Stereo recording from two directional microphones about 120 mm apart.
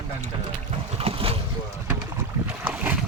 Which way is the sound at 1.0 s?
55° right (ahead or behind).